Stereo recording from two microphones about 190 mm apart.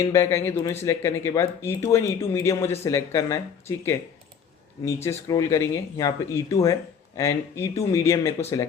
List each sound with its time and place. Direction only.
0.1 s speech: 15° left (ahead or behind)
5.0 s speech: 15° left (ahead or behind)